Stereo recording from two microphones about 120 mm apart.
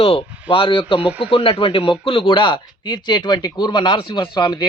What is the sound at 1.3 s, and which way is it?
Speech, 50° left (ahead or behind).